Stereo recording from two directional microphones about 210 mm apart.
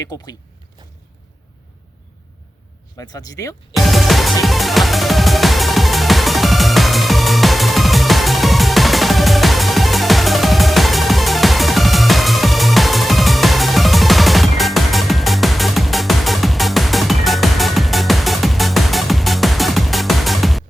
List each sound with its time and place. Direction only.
3.0 s speech: 15° left (ahead or behind)
3.8 s music: centre (ahead or behind)